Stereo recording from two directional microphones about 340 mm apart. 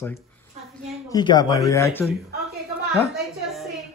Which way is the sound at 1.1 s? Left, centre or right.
Centre.